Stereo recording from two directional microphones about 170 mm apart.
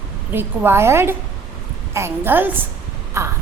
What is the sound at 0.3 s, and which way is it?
A child's voice, 15° right (ahead or behind).